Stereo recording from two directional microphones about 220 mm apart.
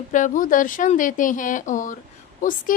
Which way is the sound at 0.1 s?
35° left (ahead or behind).